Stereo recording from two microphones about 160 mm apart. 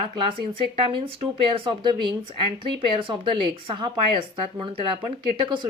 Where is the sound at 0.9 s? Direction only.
35° right (ahead or behind).